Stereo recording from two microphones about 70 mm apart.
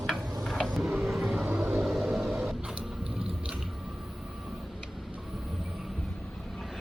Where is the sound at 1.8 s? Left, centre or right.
Centre.